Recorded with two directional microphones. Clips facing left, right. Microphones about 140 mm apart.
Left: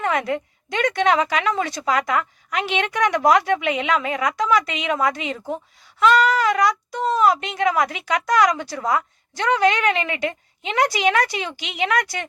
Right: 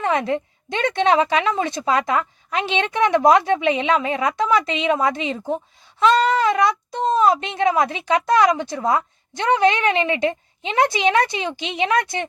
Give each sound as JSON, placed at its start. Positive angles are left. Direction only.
{"t": 0.0, "sound": "speech", "side_deg": -25}